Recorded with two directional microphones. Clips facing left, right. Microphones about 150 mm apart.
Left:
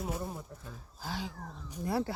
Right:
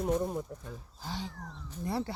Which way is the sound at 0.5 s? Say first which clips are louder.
Right 5 dB; 15° right (ahead or behind).